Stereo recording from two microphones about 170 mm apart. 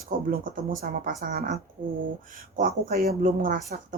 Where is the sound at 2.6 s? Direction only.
65° right (ahead or behind).